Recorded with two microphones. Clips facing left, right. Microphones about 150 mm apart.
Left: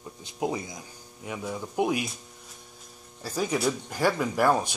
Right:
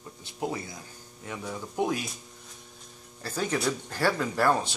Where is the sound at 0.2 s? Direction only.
15° left (ahead or behind).